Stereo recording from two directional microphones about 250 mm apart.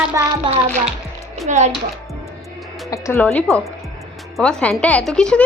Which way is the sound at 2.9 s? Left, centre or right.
Centre.